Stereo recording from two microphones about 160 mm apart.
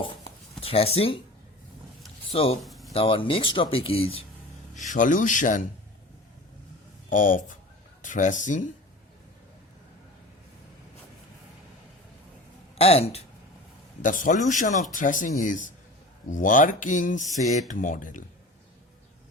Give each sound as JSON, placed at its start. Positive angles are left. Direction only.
{"t": 0.0, "sound": "writing", "side_deg": 35}
{"t": 2.3, "sound": "speech", "side_deg": 40}
{"t": 2.6, "sound": "a sound", "side_deg": 0}
{"t": 2.9, "sound": "speech", "side_deg": 35}
{"t": 4.9, "sound": "speech", "side_deg": 55}
{"t": 7.1, "sound": "speech", "side_deg": 55}
{"t": 12.7, "sound": "speech", "side_deg": 40}
{"t": 14.0, "sound": "speech", "side_deg": 55}